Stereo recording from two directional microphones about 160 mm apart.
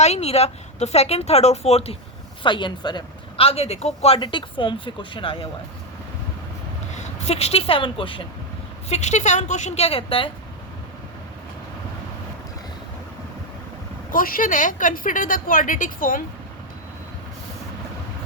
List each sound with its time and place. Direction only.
0.0 s speech: 40° left (ahead or behind)
6.9 s speech: 45° left (ahead or behind)
8.9 s a woman's voice: 45° left (ahead or behind)
14.1 s a woman's voice: 60° left (ahead or behind)